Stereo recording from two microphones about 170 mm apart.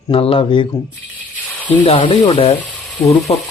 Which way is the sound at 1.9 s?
30° left (ahead or behind).